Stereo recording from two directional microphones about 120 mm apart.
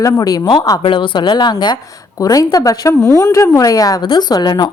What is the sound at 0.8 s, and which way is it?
A woman's voice, 45° left (ahead or behind).